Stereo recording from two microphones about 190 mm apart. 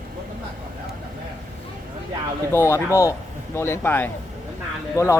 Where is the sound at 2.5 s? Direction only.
15° left (ahead or behind).